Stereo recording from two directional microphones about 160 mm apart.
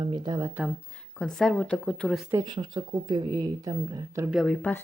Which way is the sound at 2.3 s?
25° right (ahead or behind).